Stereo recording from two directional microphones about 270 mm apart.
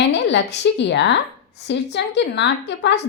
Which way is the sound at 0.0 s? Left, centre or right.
Left.